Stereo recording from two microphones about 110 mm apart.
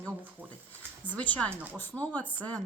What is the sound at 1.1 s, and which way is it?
Speech, 15° left (ahead or behind).